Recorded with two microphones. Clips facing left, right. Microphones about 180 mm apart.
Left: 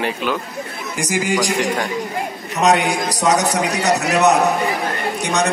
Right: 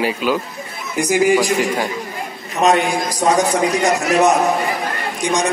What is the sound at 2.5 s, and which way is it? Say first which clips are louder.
A man's voice: right 1 dB; 75° left (ahead or behind).